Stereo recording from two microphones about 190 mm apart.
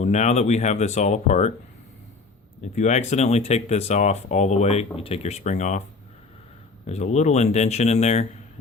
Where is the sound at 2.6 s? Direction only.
40° left (ahead or behind).